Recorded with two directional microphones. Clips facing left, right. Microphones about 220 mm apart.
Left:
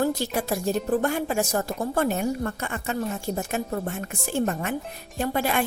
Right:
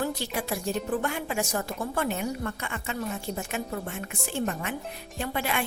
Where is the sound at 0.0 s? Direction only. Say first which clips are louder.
Left 5 dB; 40° left (ahead or behind).